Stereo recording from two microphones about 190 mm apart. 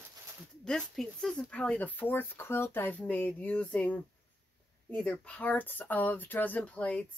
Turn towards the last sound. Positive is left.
turn(degrees=5)  # may be behind; listen again after turning